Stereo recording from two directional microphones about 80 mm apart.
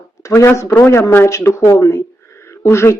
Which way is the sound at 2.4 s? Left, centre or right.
Left.